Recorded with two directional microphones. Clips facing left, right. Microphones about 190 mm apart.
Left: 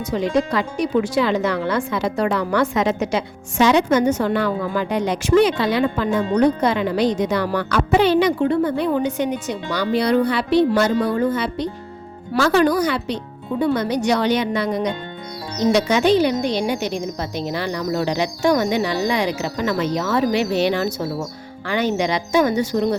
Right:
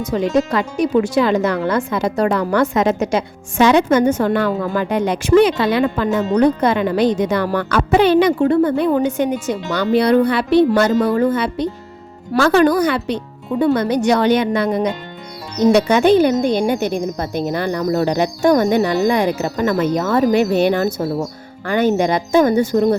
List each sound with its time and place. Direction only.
0.0 s speech: 50° right (ahead or behind)